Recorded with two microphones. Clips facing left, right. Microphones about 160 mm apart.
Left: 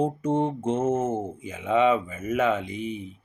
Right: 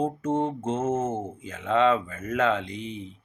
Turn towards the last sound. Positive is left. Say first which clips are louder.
# left 2 dB
turn(degrees=5)  # may be behind; listen again after turning